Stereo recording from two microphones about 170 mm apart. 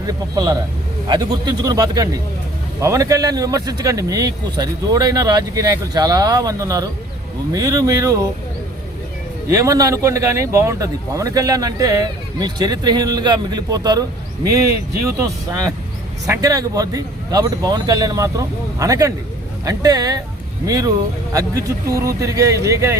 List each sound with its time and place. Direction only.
0.1 s speech: 20° right (ahead or behind)
9.5 s speech: 20° right (ahead or behind)
16.2 s speech: 20° right (ahead or behind)